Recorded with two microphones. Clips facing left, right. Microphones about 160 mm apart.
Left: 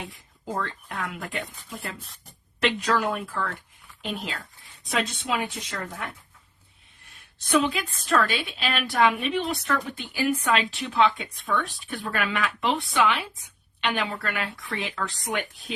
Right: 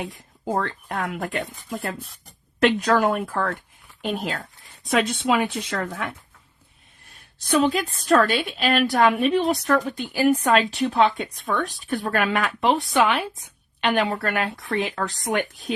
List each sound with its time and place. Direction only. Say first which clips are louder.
0.1 s a woman's voice: right 7 dB; 55° right (ahead or behind); by 6.1 s 80° right
7.3 s a woman's voice: right 3 dB; 40° right (ahead or behind)